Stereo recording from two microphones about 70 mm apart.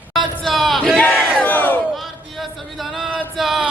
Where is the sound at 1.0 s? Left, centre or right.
Centre.